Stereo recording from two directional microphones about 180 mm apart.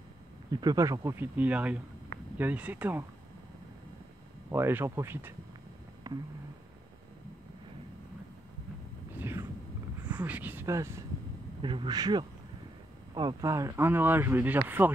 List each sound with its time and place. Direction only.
0.5 s speech: 20° right (ahead or behind)
4.5 s speech: 15° right (ahead or behind)
6.0 s a sound: 20° right (ahead or behind)
9.1 s a sound: 15° right (ahead or behind)
10.0 s speech: 10° right (ahead or behind)
11.6 s speech: 25° right (ahead or behind); by 14.9 s 10° right (ahead or behind)